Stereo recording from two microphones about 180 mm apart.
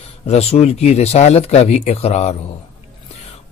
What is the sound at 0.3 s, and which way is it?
Speech, 35° left (ahead or behind).